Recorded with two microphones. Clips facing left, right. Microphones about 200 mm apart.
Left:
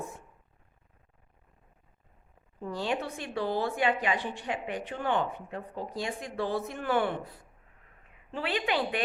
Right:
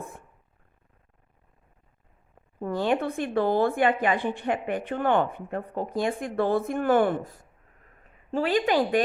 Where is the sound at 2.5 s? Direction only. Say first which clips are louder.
Right 7 dB; 55° right (ahead or behind).